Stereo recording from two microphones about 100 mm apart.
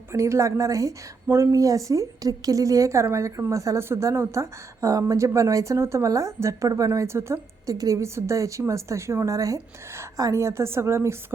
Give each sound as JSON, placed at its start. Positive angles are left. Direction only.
{"t": 0.1, "sound": "a woman's voice", "side_deg": -30}